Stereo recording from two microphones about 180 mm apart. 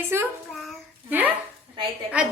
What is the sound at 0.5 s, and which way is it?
Child singing, 5° right (ahead or behind).